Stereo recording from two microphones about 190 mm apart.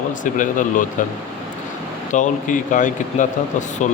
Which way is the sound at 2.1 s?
40° left (ahead or behind).